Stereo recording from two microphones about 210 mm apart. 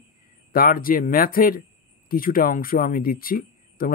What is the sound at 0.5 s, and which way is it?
Speech, 45° left (ahead or behind).